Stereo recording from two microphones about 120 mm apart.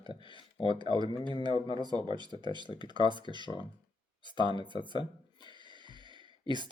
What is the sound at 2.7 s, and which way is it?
Speech, 40° left (ahead or behind).